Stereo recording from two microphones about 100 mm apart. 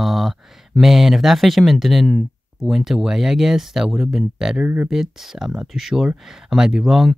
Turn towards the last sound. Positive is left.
turn(degrees=-5)  # may be behind; listen again after turning